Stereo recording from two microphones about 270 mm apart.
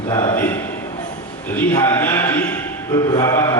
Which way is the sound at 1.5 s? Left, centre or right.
Centre.